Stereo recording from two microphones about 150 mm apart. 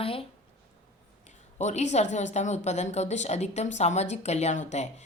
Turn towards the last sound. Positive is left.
turn(degrees=50)  # may be behind; listen again after turning